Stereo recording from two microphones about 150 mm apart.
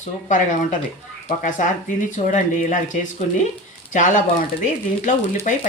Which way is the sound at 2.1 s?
55° left (ahead or behind).